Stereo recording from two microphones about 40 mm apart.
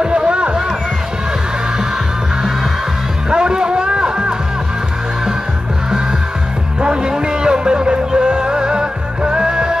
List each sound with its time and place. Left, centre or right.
0.0 s a sound: right
3.3 s music: right
6.8 s music: right